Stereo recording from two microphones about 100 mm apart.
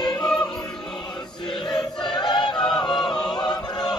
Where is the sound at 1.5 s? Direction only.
55° left (ahead or behind).